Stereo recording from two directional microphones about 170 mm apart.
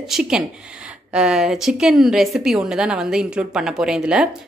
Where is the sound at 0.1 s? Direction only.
5° right (ahead or behind).